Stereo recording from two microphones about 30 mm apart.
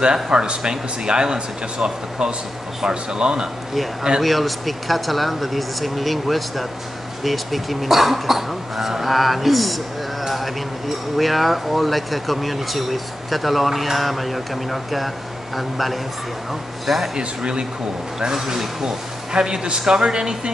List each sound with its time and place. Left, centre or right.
0.0 s speech: right
4.2 s speech: centre
11.1 s speech: centre
17.2 s speech: right
18.2 s speech: centre
19.3 s speech: right